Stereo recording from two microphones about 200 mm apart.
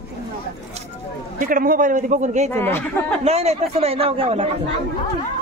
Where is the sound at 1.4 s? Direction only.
45° right (ahead or behind).